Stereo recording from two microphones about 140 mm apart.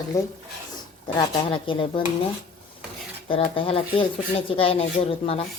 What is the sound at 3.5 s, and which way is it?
Speech, 40° left (ahead or behind).